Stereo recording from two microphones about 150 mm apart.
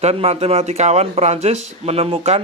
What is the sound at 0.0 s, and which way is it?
A man's voice, 40° right (ahead or behind).